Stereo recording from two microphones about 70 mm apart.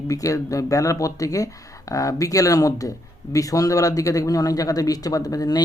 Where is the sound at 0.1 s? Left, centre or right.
Left.